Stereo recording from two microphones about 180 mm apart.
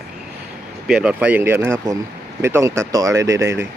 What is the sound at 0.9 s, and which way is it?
Speech, 5° right (ahead or behind).